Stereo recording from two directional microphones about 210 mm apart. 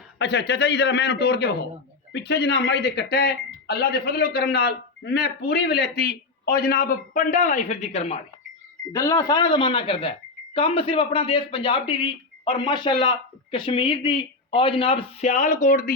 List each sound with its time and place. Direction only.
0.2 s a man's voice: 50° left (ahead or behind); by 8.2 s 30° left (ahead or behind)
8.9 s a woman's voice: 15° left (ahead or behind); by 16.0 s 40° left (ahead or behind)